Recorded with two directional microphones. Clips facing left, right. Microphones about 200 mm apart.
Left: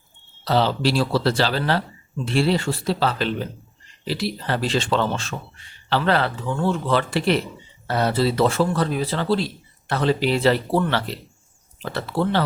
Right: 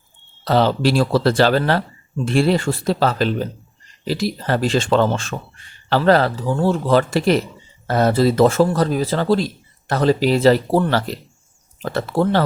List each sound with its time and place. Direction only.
0.4 s speech: 50° right (ahead or behind)